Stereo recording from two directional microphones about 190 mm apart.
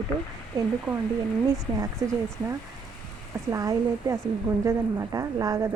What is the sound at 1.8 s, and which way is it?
A woman's voice, 15° right (ahead or behind).